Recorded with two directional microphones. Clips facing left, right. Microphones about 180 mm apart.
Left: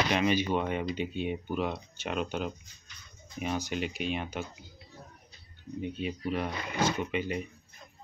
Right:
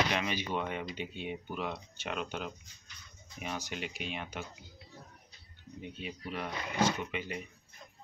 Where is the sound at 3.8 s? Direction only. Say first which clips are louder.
Left 7 dB; 25° left (ahead or behind).